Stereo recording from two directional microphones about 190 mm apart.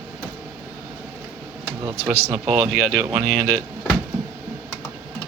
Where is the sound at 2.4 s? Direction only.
25° right (ahead or behind).